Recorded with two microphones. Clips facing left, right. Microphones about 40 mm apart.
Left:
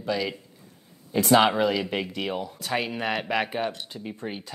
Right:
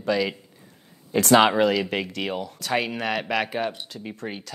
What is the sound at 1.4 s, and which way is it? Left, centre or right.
Speech, right.